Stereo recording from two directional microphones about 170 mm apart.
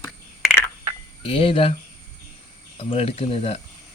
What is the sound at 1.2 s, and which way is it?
Speech, 30° left (ahead or behind).